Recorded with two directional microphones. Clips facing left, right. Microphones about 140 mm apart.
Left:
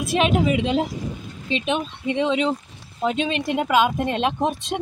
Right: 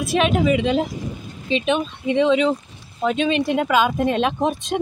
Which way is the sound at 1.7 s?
10° left (ahead or behind).